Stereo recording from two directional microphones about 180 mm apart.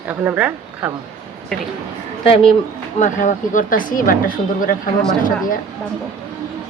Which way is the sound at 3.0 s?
45° left (ahead or behind).